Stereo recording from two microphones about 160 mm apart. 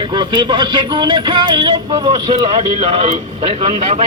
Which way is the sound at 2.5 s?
40° right (ahead or behind).